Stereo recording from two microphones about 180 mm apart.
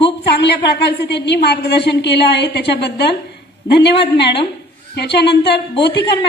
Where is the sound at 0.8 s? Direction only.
70° left (ahead or behind).